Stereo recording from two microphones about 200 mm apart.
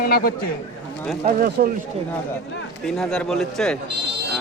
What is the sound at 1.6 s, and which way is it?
Speech, 50° right (ahead or behind).